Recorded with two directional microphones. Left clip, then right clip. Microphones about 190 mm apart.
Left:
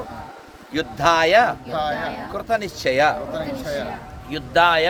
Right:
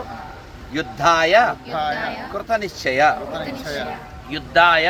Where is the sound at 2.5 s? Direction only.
35° left (ahead or behind).